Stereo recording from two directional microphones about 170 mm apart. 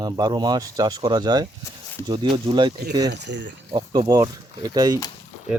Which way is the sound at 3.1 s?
90° right.